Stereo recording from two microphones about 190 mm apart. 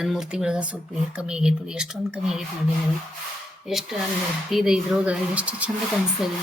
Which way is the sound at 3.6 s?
Centre (ahead or behind).